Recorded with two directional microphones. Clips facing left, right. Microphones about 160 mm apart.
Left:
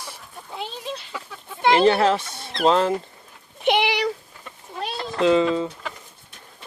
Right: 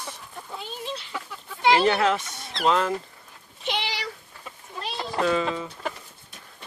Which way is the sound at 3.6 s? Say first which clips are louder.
Left 10 dB; 60° left (ahead or behind).